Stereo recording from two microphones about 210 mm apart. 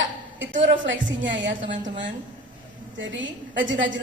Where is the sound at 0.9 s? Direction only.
60° right (ahead or behind).